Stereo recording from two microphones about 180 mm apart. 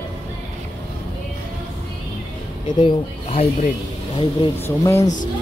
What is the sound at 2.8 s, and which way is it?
Speech, 35° left (ahead or behind).